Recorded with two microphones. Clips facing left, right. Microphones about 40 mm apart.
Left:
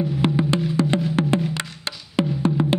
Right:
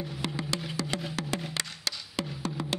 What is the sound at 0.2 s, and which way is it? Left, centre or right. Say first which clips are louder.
Music: left 12 dB; left.